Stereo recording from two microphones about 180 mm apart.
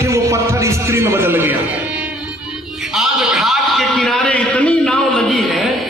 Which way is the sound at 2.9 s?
Centre (ahead or behind).